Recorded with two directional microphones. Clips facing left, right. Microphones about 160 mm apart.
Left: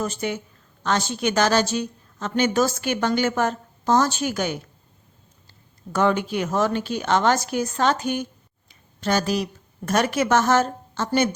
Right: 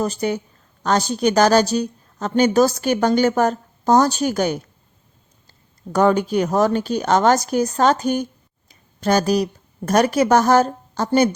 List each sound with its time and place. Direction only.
0.0 s a woman's voice: 35° right (ahead or behind)
5.9 s a woman's voice: 40° right (ahead or behind)